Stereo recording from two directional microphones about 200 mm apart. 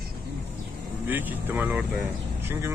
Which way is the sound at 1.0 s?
10° right (ahead or behind).